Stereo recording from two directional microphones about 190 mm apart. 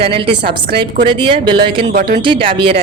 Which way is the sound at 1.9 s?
60° right (ahead or behind).